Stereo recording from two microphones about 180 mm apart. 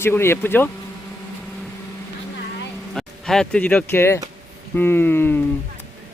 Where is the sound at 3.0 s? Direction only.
5° left (ahead or behind).